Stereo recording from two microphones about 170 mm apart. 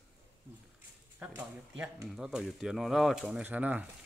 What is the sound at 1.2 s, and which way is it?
Speech, 10° right (ahead or behind).